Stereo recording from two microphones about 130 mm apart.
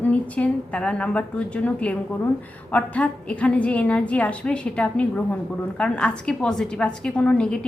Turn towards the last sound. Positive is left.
turn(degrees=5)  # may be behind; listen again after turning